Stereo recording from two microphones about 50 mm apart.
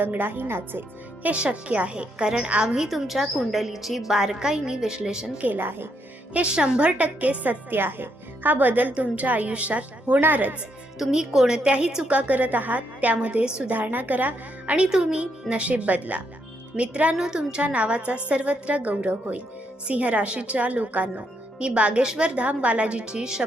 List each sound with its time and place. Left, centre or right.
0.0 s a woman's voice: right
1.3 s a woman's voice: right
2.6 s a woman's voice: centre
5.5 s speech: right
6.3 s a woman's voice: right
7.7 s a woman's voice: right
10.9 s a woman's voice: centre
12.1 s a woman's voice: right
14.8 s a woman's voice: centre
17.2 s a woman's voice: centre
22.4 s a woman's voice: right